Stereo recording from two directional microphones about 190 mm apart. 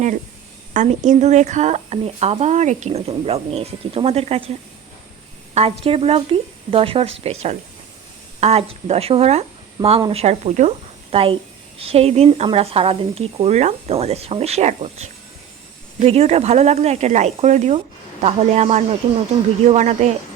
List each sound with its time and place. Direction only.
0.7 s a woman's voice: 40° right (ahead or behind)
5.5 s a woman's voice: 30° right (ahead or behind)